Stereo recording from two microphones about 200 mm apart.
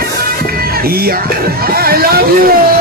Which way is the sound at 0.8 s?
50° right (ahead or behind).